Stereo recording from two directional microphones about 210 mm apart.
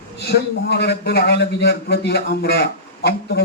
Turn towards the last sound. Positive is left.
turn(degrees=50)  # may be behind; listen again after turning